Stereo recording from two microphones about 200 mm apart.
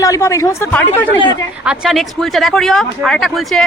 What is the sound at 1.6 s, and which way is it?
Speech, 5° right (ahead or behind).